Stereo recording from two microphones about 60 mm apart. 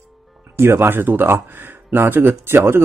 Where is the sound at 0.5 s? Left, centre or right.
Right.